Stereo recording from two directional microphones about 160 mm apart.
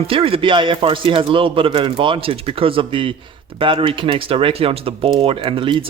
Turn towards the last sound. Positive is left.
turn(degrees=-30)  # may be behind; listen again after turning